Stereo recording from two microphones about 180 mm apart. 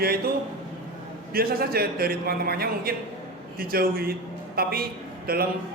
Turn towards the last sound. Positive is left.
turn(degrees=-55)  # may be behind; listen again after turning